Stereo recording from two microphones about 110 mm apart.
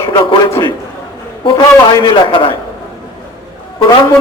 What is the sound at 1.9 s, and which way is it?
Speech, 45° left (ahead or behind).